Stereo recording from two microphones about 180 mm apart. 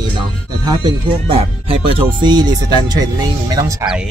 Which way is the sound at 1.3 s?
30° right (ahead or behind).